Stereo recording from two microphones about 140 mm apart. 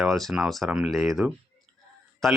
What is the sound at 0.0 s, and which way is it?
Speech, centre (ahead or behind).